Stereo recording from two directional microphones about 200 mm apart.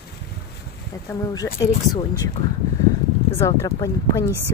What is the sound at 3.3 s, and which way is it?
Speech, 15° left (ahead or behind).